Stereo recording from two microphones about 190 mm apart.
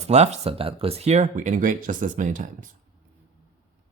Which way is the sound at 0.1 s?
35° right (ahead or behind).